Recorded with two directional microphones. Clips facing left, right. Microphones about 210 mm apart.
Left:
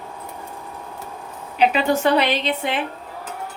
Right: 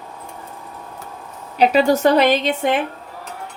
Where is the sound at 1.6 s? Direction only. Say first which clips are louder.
Right 4 dB; 40° right (ahead or behind).